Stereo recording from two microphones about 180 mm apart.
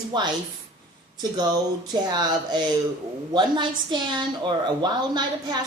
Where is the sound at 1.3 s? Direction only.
25° right (ahead or behind).